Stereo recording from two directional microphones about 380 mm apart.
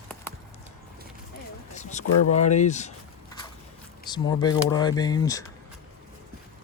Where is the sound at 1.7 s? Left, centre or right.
Centre.